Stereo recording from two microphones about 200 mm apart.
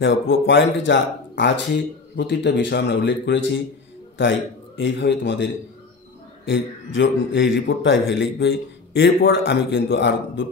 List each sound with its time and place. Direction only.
0.0 s a man's voice: 65° left (ahead or behind)